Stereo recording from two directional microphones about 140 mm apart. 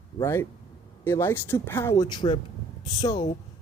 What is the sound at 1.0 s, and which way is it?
Speech, 15° left (ahead or behind).